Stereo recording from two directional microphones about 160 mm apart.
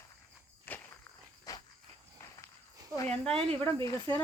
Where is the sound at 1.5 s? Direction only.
20° left (ahead or behind).